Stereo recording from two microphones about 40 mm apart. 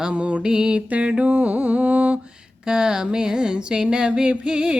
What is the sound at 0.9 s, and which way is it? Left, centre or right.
Music, right.